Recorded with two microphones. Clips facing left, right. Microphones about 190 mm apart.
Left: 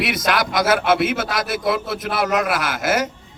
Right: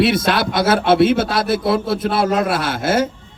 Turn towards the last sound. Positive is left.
turn(degrees=-30)  # may be behind; listen again after turning